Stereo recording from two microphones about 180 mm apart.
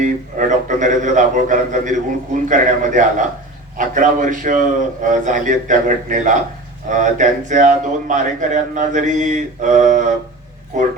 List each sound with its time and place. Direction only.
0.3 s a man's voice: 45° right (ahead or behind)